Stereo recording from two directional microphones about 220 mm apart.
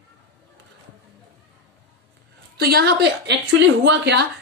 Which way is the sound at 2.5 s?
45° right (ahead or behind).